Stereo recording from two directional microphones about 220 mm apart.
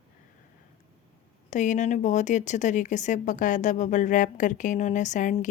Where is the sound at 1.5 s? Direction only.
35° left (ahead or behind).